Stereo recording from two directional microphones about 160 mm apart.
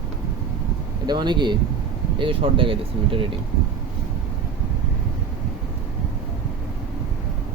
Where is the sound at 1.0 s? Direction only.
25° right (ahead or behind).